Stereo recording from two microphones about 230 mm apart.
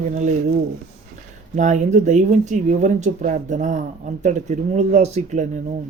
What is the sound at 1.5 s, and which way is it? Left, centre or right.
Speech, right.